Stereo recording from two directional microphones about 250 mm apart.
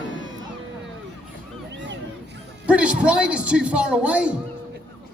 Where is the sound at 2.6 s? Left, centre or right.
Centre.